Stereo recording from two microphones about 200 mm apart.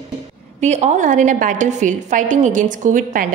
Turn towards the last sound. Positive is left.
turn(degrees=-40)  # may be behind; listen again after turning